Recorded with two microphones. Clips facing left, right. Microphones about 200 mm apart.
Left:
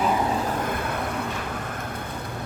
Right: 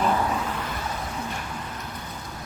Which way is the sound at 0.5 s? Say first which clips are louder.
Left 5 dB; 50° left (ahead or behind).